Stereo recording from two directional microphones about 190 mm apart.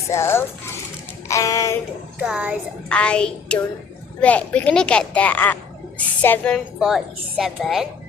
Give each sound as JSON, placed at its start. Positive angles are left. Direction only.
{"t": 0.1, "sound": "a child's voice", "side_deg": 15}
{"t": 2.2, "sound": "a woman's voice", "side_deg": -5}
{"t": 2.9, "sound": "a woman's voice", "side_deg": 5}
{"t": 6.7, "sound": "a woman's voice", "side_deg": 0}